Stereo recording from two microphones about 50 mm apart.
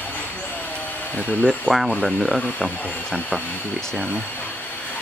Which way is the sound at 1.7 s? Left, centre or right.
Left.